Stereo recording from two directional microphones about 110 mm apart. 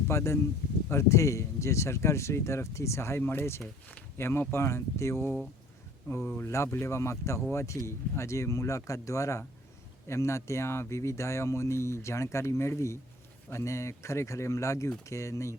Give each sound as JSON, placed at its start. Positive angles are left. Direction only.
{"t": 0.1, "sound": "speech", "side_deg": 25}